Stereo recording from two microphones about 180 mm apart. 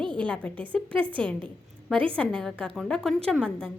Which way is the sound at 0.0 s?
25° right (ahead or behind).